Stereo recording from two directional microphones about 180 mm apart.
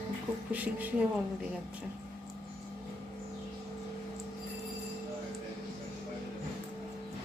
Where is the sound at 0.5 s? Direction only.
10° right (ahead or behind).